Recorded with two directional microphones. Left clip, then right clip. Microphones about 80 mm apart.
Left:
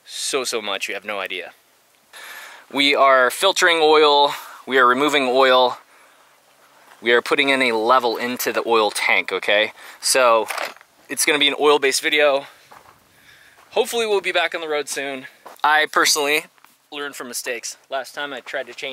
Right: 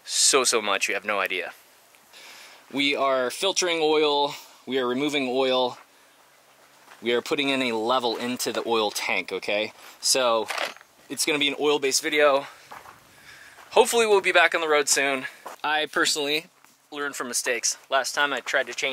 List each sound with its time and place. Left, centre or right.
0.0 s speech: centre
2.1 s speech: left
7.0 s speech: left; by 10.6 s centre
11.1 s speech: left
12.4 s a sound: centre
13.3 s speech: centre
15.6 s speech: centre
16.1 s speech: left
16.9 s speech: centre